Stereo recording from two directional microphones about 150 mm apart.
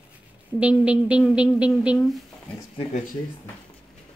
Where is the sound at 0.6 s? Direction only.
10° right (ahead or behind).